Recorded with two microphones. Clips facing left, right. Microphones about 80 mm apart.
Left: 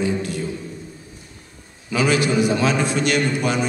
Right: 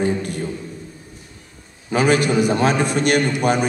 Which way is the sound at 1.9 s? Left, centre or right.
Right.